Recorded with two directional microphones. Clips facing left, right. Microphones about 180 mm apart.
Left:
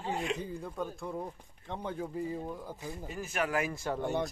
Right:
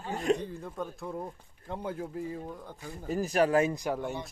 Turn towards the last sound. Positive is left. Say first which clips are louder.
# right 3 dB
turn(degrees=-15)  # may be behind; listen again after turning